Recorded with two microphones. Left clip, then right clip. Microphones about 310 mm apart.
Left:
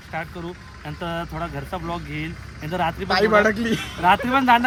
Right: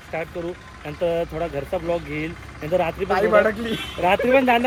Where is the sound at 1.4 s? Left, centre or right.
Centre.